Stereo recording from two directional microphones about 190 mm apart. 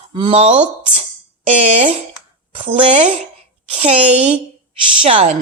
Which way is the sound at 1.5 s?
35° right (ahead or behind).